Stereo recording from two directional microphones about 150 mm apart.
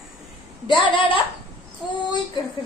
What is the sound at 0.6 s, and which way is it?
Speech, 35° left (ahead or behind).